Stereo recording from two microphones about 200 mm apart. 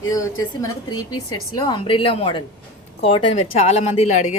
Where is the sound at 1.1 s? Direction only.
90° left.